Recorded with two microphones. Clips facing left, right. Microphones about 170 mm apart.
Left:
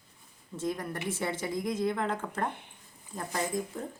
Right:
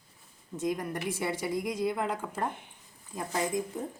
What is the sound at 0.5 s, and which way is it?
A woman's voice, 15° right (ahead or behind).